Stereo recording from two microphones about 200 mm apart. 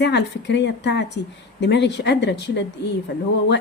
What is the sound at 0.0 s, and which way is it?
A woman's voice, 60° left (ahead or behind).